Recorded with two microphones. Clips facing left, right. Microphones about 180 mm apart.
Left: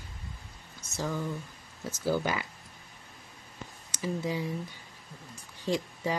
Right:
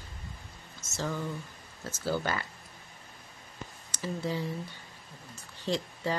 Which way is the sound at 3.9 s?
15° left (ahead or behind).